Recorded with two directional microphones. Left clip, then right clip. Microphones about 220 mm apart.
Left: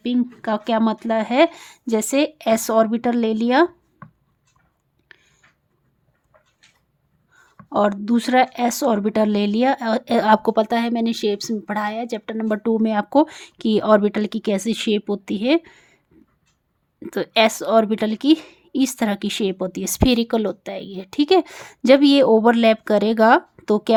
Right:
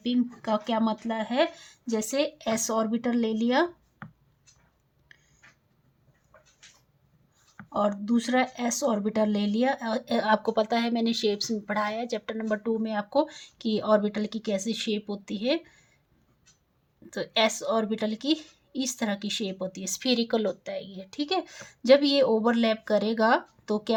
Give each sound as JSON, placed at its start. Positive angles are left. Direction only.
{"t": 0.0, "sound": "speech", "side_deg": 40}
{"t": 7.7, "sound": "speech", "side_deg": 40}
{"t": 17.1, "sound": "speech", "side_deg": 40}